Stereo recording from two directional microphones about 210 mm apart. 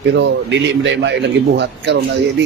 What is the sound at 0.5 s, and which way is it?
Speech, 60° right (ahead or behind).